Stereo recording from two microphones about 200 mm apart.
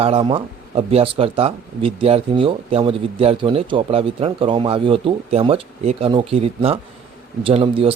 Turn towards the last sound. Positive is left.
turn(degrees=-25)  # may be behind; listen again after turning